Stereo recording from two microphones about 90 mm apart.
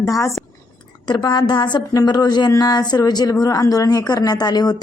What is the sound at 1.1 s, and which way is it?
A woman's voice, 55° left (ahead or behind).